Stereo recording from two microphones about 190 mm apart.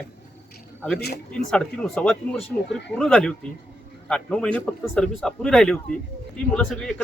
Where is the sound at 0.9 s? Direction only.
55° left (ahead or behind).